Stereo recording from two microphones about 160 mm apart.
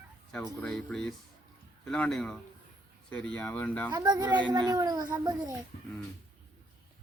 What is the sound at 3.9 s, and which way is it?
A child's voice, 25° right (ahead or behind).